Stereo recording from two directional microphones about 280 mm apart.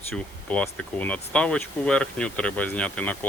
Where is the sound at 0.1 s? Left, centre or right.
Centre.